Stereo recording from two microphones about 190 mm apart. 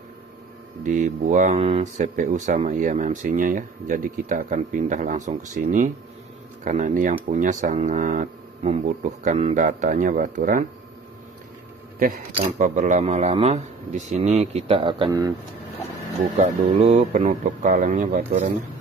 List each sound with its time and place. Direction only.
0.8 s speech: 40° right (ahead or behind)
12.5 s speech: 40° right (ahead or behind); by 15.3 s 20° right (ahead or behind)
16.3 s speech: 35° right (ahead or behind)